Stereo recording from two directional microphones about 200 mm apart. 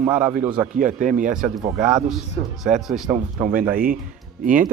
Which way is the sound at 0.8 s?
40° right (ahead or behind).